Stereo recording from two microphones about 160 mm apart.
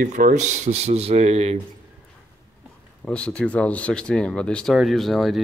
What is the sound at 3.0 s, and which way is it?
Speech, 5° left (ahead or behind).